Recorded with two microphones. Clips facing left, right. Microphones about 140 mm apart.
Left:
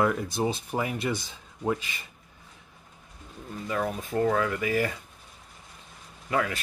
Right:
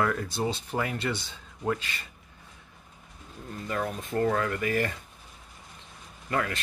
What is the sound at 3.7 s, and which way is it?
Speech, 5° left (ahead or behind).